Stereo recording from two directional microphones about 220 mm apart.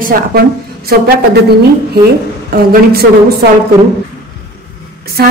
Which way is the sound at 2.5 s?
45° right (ahead or behind).